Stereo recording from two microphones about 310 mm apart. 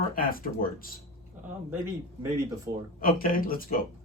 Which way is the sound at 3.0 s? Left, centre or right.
Left.